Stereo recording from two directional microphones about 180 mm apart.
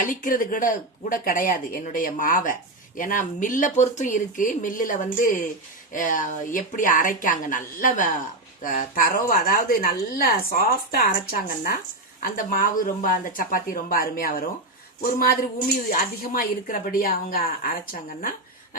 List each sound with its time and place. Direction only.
0.0 s speech: 50° left (ahead or behind)